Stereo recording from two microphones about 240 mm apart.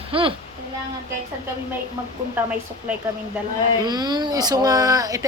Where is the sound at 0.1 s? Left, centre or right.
Right.